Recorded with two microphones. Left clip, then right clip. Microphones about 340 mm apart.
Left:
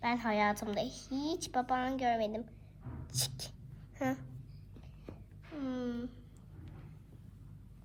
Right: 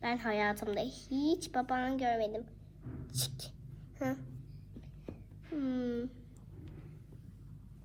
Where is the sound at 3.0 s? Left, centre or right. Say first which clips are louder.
Left 2 dB; left.